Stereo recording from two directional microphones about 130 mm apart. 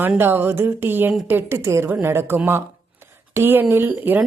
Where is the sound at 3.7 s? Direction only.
15° right (ahead or behind).